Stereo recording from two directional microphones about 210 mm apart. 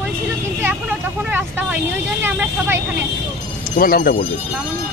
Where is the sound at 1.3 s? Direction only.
10° right (ahead or behind).